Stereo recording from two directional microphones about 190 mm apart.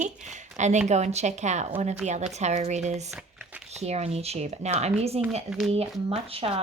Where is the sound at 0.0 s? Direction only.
40° right (ahead or behind).